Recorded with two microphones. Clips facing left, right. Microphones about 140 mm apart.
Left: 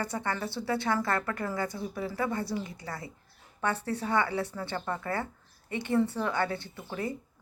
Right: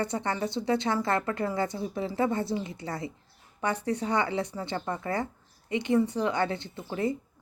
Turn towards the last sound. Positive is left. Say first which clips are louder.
# right 5 dB
turn(degrees=-25)  # may be behind; listen again after turning